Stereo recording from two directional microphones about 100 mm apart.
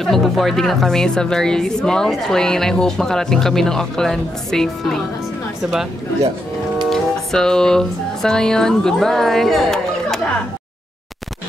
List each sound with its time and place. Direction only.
0.0 s a woman's voice: 5° left (ahead or behind)
6.9 s speech: 5° left (ahead or behind)